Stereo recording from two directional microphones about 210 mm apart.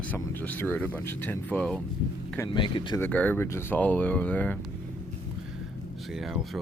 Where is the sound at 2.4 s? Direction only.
20° left (ahead or behind).